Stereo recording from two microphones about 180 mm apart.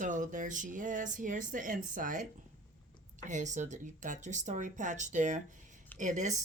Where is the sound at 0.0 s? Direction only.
45° right (ahead or behind).